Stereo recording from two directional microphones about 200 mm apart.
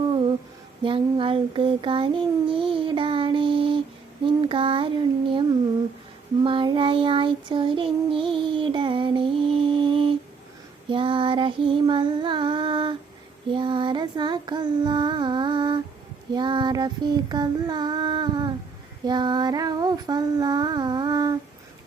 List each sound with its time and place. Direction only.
0.9 s child singing: 25° right (ahead or behind)
10.8 s female singing: 25° right (ahead or behind)
13.5 s child singing: 25° right (ahead or behind)